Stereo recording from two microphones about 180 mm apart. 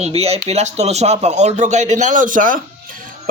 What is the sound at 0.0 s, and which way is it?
A man's voice, 35° right (ahead or behind).